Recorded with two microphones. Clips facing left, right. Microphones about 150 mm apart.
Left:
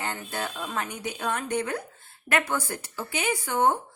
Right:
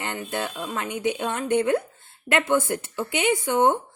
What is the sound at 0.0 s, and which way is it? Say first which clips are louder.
Speech: right 3 dB; 20° right (ahead or behind).